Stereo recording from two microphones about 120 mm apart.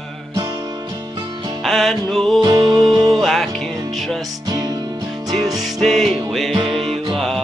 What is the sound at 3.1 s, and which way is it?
Music, centre (ahead or behind).